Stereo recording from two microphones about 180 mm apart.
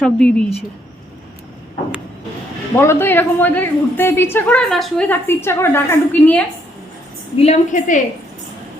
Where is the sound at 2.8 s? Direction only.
15° left (ahead or behind).